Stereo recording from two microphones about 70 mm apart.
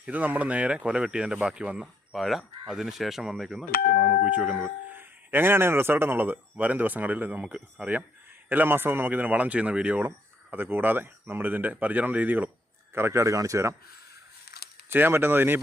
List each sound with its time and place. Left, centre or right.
0.0 s speech: right
2.1 s speech: centre
4.2 s speech: centre
4.9 s speech: right
10.5 s speech: right
12.9 s speech: right
14.9 s speech: right